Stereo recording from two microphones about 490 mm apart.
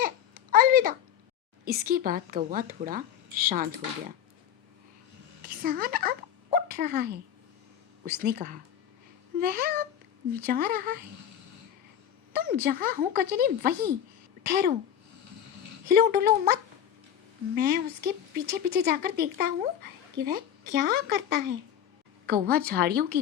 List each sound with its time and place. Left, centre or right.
0.0 s a sound: centre
1.6 s speech: centre
5.5 s speech: centre
12.3 s speech: centre
15.9 s speech: centre